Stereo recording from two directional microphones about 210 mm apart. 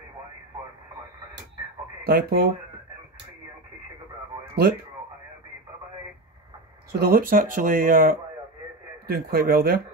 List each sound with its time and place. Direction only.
2.0 s speech: 50° right (ahead or behind)
6.9 s speech: 45° right (ahead or behind)